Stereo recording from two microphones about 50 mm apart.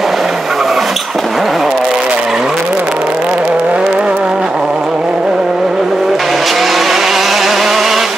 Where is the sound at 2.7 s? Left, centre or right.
Right.